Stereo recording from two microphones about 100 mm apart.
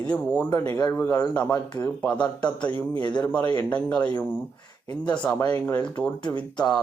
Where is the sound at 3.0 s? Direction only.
45° left (ahead or behind).